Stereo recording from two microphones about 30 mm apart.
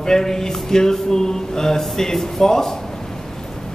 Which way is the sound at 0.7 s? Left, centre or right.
Centre.